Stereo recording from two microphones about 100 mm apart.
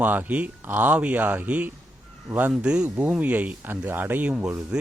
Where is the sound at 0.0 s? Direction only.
15° right (ahead or behind).